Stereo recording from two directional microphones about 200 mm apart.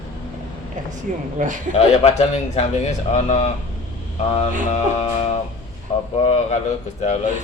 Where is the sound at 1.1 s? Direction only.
40° right (ahead or behind).